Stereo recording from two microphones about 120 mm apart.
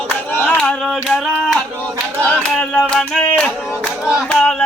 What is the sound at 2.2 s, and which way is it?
Clapping, 15° left (ahead or behind).